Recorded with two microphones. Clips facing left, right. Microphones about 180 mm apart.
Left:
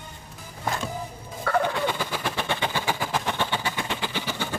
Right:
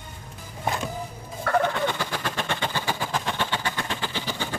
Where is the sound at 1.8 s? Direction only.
10° left (ahead or behind).